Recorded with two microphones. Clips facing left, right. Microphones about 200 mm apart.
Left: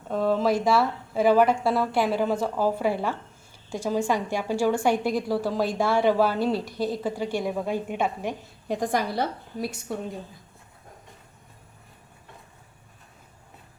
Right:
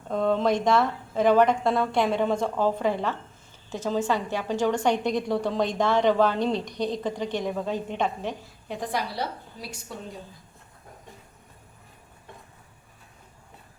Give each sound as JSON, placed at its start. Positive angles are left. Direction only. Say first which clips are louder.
{"t": 0.1, "sound": "a woman's voice", "louder": "even", "side_deg": 5}
{"t": 8.6, "sound": "a woman's voice", "louder": "left 5 dB", "side_deg": 45}